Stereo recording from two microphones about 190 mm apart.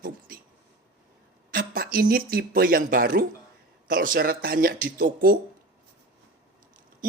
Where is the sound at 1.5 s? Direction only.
50° right (ahead or behind).